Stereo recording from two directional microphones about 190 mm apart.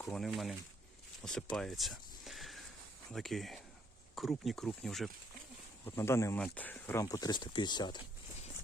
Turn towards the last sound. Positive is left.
turn(degrees=25)  # may be behind; listen again after turning